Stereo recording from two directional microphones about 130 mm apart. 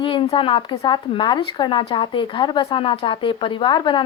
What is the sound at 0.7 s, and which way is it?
Speech, 30° left (ahead or behind).